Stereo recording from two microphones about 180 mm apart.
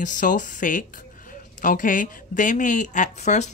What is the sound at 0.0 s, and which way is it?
Speech, 45° left (ahead or behind).